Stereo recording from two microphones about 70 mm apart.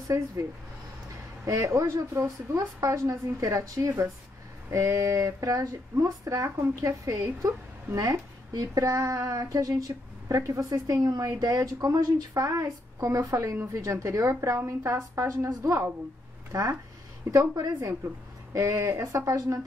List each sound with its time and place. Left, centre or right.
0.1 s speech: right
1.4 s speech: right
17.3 s speech: right